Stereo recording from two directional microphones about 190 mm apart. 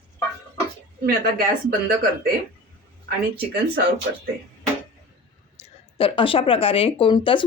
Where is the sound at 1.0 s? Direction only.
50° right (ahead or behind).